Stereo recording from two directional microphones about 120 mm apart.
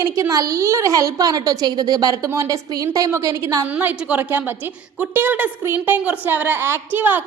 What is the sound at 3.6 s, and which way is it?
A woman's voice, 15° right (ahead or behind).